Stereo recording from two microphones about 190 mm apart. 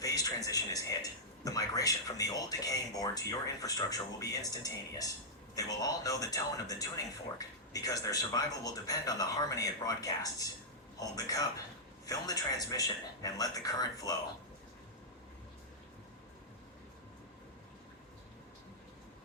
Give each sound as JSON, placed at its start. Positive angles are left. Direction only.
{"t": 0.0, "sound": "music", "side_deg": 20}
{"t": 1.5, "sound": "speech", "side_deg": 20}